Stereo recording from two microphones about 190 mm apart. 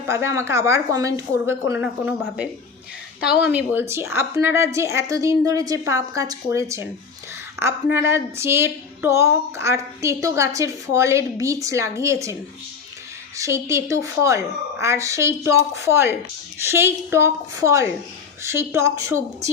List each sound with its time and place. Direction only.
0.1 s a woman's voice: 15° right (ahead or behind)